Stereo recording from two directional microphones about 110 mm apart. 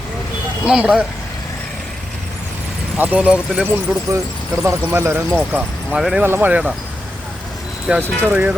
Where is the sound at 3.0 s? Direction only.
15° right (ahead or behind).